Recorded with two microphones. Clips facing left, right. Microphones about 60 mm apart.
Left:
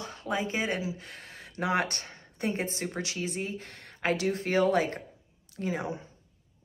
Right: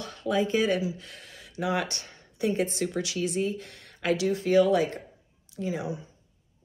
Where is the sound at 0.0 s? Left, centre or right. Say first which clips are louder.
Right 5 dB; left.